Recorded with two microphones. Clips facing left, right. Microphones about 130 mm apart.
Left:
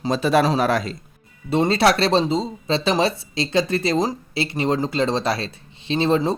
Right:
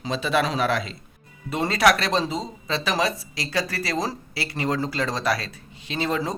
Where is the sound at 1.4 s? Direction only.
25° left (ahead or behind).